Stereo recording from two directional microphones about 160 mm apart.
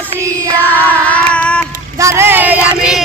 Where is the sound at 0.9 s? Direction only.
10° left (ahead or behind).